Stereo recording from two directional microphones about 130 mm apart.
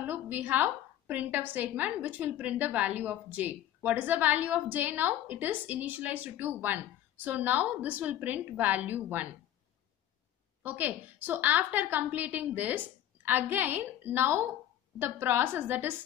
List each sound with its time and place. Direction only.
0.0 s a woman's voice: 15° right (ahead or behind)
10.6 s a woman's voice: 15° right (ahead or behind)